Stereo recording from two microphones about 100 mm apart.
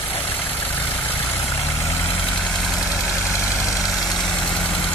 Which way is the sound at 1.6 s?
25° left (ahead or behind).